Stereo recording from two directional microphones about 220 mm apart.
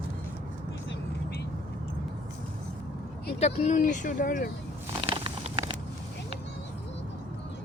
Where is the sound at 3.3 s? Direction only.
30° left (ahead or behind).